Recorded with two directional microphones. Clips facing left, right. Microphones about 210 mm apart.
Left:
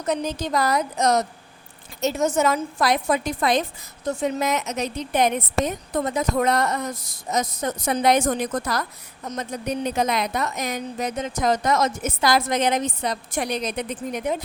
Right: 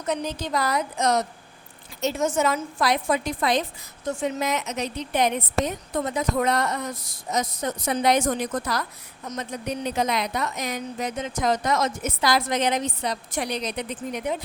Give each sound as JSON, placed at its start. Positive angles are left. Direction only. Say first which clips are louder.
{"t": 0.1, "sound": "a woman's voice", "louder": "left 3 dB", "side_deg": 40}